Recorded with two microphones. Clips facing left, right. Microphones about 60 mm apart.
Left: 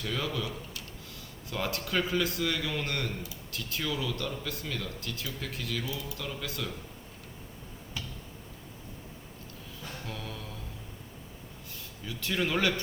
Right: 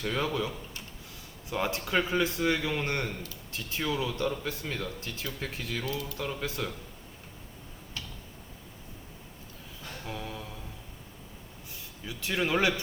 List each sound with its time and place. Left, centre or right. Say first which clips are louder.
0.0 s a man's voice: right 3 dB; right
10.1 s a sound: right 5 dB; centre
12.0 s speech: right 1 dB; centre